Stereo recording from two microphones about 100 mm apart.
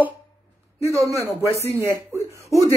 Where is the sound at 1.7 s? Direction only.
30° right (ahead or behind).